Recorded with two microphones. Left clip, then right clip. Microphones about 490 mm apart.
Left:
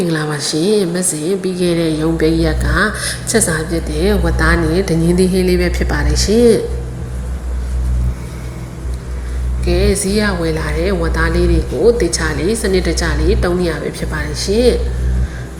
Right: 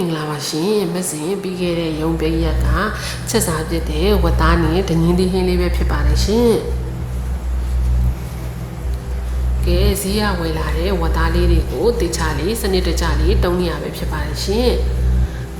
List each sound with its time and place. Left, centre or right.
0.1 s a woman's voice: right
9.6 s a woman's voice: right